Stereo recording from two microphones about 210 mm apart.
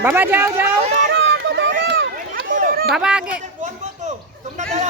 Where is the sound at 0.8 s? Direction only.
30° right (ahead or behind).